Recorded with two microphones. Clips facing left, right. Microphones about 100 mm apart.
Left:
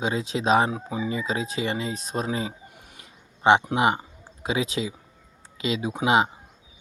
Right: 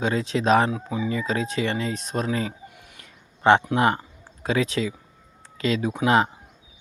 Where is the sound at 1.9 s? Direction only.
35° left (ahead or behind).